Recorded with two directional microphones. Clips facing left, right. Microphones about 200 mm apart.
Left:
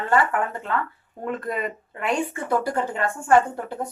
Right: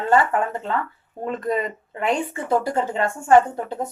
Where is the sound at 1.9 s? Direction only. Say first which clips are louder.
Right 2 dB; 25° right (ahead or behind).